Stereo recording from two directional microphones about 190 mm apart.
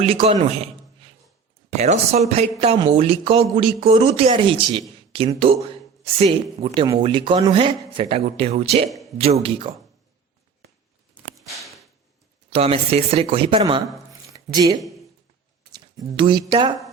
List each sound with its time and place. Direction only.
0.0 s speech: 30° right (ahead or behind)
1.7 s speech: 35° right (ahead or behind)
6.7 s speech: 25° right (ahead or behind)
11.4 s a sound: centre (ahead or behind)
12.5 s speech: 30° right (ahead or behind)
14.1 s a sound: 20° right (ahead or behind)
15.7 s speech: 25° right (ahead or behind)